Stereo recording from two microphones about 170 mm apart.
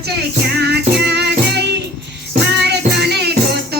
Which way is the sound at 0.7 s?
75° right (ahead or behind).